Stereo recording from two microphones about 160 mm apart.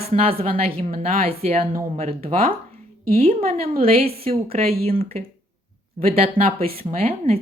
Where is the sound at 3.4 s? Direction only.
70° right (ahead or behind).